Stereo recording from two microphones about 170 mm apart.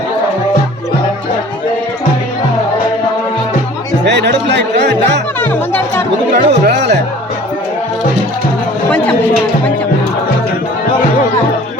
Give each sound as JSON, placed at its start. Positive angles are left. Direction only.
{"t": 4.0, "sound": "music", "side_deg": -85}
{"t": 5.4, "sound": "music", "side_deg": 10}
{"t": 6.3, "sound": "speech", "side_deg": -75}